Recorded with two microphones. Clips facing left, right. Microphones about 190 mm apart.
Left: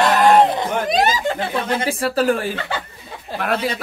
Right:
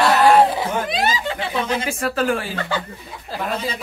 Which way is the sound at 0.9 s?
45° left (ahead or behind).